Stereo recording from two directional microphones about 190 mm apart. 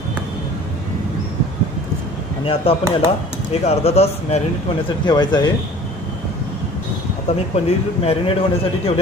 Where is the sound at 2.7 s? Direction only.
30° left (ahead or behind).